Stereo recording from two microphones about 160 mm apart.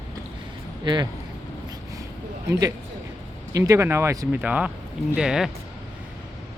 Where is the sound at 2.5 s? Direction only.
20° right (ahead or behind); by 5.5 s 5° right (ahead or behind).